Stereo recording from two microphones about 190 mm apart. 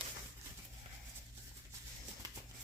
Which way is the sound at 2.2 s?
20° right (ahead or behind).